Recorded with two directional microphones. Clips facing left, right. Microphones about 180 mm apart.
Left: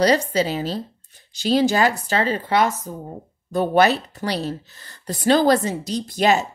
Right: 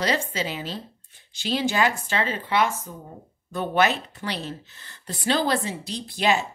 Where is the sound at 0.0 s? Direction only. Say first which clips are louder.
Left 8 dB; 40° left (ahead or behind).